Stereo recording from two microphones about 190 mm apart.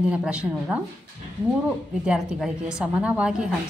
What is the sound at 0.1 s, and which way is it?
Speech, 5° right (ahead or behind).